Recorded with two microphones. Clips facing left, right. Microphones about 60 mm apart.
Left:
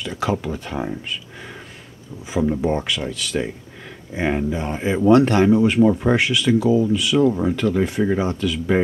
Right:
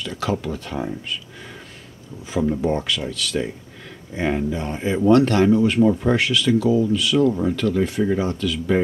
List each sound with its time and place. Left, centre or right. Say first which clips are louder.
0.0 s speech: left 1 dB; centre
2.3 s speech: left 1 dB; centre